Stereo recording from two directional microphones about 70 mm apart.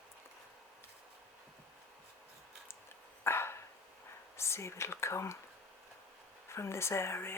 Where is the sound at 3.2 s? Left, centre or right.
Left.